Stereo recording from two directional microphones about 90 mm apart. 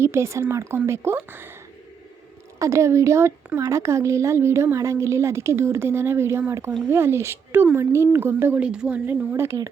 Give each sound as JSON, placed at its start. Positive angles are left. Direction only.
{"t": 0.0, "sound": "a woman's voice", "side_deg": -30}
{"t": 2.6, "sound": "a woman's voice", "side_deg": -35}
{"t": 8.5, "sound": "speech", "side_deg": -10}
{"t": 9.0, "sound": "a woman's voice", "side_deg": -30}